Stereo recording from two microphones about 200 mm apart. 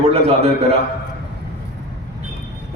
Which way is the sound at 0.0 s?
30° right (ahead or behind).